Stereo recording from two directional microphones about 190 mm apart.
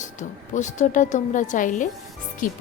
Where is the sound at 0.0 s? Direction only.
40° left (ahead or behind).